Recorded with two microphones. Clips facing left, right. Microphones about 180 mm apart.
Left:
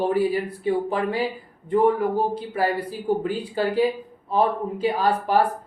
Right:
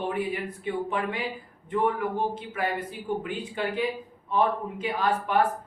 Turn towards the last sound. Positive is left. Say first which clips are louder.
# left 4 dB
turn(degrees=35)  # may be behind; listen again after turning